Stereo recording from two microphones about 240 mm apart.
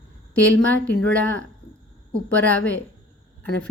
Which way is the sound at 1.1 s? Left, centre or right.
Centre.